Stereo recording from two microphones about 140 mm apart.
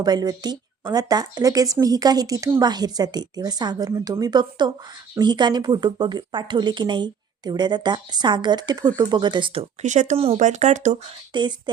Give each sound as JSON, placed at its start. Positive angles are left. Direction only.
{"t": 0.0, "sound": "a woman's voice", "side_deg": -30}
{"t": 9.8, "sound": "speech", "side_deg": -60}
{"t": 10.2, "sound": "speech", "side_deg": -45}
{"t": 11.3, "sound": "a woman's voice", "side_deg": -30}